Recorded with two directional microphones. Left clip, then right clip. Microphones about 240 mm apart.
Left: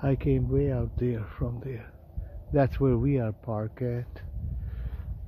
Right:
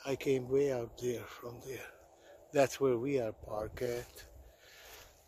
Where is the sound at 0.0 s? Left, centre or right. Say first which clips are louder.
Left 5 dB; centre.